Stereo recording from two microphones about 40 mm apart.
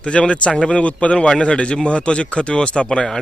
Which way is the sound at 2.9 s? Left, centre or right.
Centre.